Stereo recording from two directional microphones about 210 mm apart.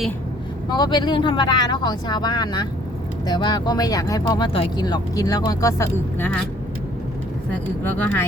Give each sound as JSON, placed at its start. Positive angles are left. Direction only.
{"t": 0.7, "sound": "speech", "side_deg": 20}
{"t": 7.9, "sound": "speech", "side_deg": 10}